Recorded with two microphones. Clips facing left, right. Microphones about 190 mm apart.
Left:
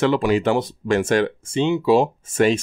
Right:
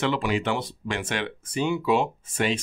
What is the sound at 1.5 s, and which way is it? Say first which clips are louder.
Speech: left 6 dB; 25° left (ahead or behind).